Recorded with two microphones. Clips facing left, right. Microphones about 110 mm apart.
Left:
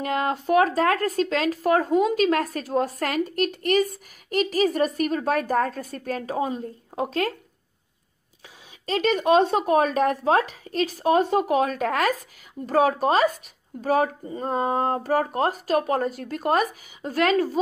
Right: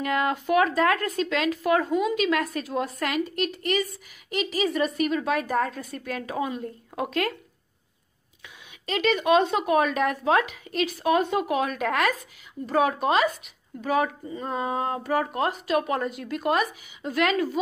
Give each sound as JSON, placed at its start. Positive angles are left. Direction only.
{"t": 0.0, "sound": "speech", "side_deg": 35}
{"t": 8.8, "sound": "speech", "side_deg": 35}